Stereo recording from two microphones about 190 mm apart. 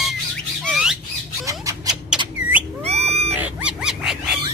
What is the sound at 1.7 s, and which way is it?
Rodents, 15° right (ahead or behind).